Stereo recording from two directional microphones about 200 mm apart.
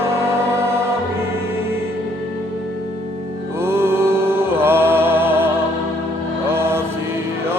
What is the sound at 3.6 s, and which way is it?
Music, 10° right (ahead or behind).